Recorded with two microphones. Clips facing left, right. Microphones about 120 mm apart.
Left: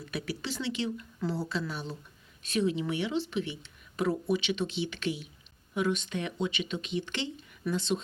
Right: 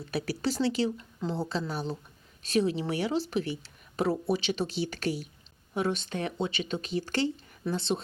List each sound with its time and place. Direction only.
0.0 s speech: 35° right (ahead or behind)
1.2 s a woman's voice: 25° right (ahead or behind)